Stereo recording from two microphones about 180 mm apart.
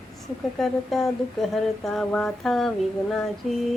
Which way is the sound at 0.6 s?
Centre (ahead or behind).